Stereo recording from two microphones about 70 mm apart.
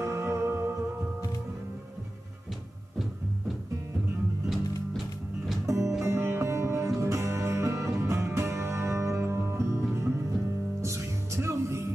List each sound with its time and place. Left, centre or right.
0.0 s music: right
5.7 s music: right